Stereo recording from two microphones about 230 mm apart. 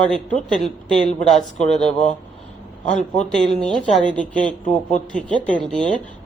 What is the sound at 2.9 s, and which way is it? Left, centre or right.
Speech, centre.